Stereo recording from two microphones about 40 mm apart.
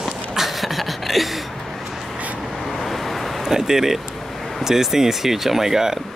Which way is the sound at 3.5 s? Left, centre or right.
Centre.